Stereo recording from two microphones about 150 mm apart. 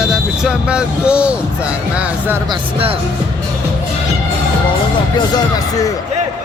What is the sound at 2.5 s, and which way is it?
Speech, 35° right (ahead or behind).